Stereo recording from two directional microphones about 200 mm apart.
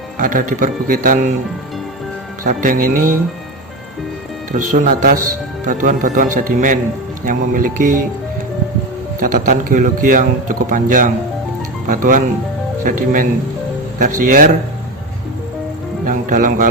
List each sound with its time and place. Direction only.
0.2 s speech: 40° right (ahead or behind)
2.4 s a man's voice: 45° right (ahead or behind)
4.5 s a man's voice: 40° right (ahead or behind)
9.2 s a man's voice: 45° right (ahead or behind)
16.0 s a man's voice: 40° right (ahead or behind)